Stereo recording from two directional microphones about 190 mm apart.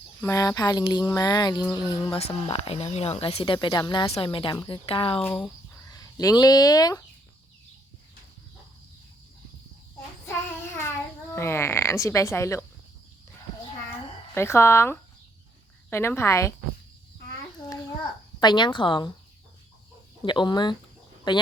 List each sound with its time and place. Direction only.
0.2 s speech: 15° left (ahead or behind)
2.1 s speech: 30° left (ahead or behind)
5.2 s speech: 5° left (ahead or behind)
5.7 s speech: 20° left (ahead or behind)
11.3 s frog: 15° left (ahead or behind)
14.3 s frog: 15° left (ahead or behind)
17.7 s a child's voice: 20° left (ahead or behind)
20.2 s speech: 25° left (ahead or behind)